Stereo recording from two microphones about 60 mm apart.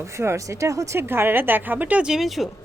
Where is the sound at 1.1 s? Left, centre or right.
Right.